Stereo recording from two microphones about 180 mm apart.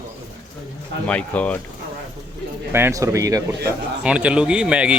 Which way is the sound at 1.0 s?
10° left (ahead or behind).